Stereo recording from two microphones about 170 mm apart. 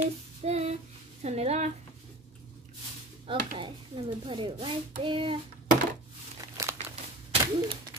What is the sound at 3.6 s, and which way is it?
Hands, 30° right (ahead or behind).